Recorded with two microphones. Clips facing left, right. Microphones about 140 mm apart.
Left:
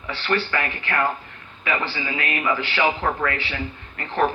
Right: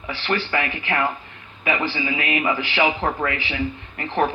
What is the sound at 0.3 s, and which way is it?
Speech, 20° right (ahead or behind).